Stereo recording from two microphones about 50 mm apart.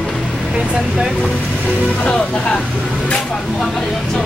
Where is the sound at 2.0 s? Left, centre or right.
Left.